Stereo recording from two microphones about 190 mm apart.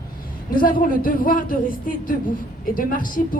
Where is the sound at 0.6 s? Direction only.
45° left (ahead or behind).